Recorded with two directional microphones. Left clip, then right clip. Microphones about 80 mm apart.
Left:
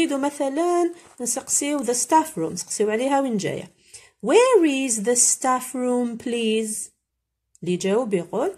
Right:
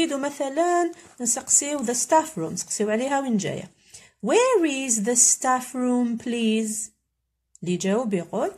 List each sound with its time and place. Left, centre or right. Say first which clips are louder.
0.0 s speech: left 3 dB; left